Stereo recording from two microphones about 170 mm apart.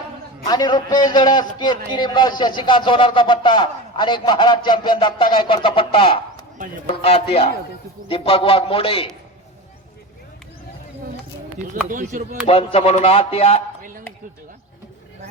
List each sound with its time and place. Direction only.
0.4 s a man's voice: 25° left (ahead or behind)
11.9 s speech: 50° right (ahead or behind)
12.5 s speech: 35° left (ahead or behind)